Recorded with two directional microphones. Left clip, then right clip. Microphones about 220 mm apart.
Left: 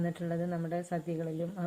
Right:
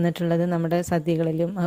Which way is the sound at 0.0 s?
45° right (ahead or behind).